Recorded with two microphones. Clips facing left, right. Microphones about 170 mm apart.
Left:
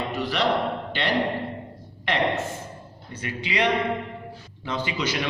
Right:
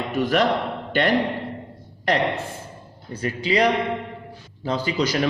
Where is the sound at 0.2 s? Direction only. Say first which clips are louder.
Right 9 dB; 50° right (ahead or behind).